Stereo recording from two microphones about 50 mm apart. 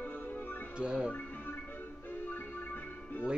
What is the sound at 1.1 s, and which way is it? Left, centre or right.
Music, left.